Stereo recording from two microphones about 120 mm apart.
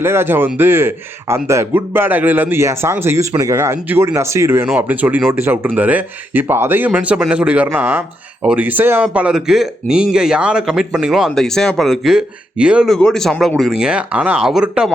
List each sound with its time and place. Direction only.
0.0 s a man's voice: 20° right (ahead or behind)
12.9 s speech: 5° left (ahead or behind)